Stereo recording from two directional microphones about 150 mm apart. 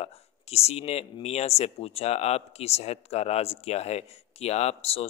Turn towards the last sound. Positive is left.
turn(degrees=40)  # may be behind; listen again after turning